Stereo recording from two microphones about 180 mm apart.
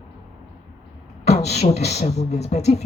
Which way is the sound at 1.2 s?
35° left (ahead or behind).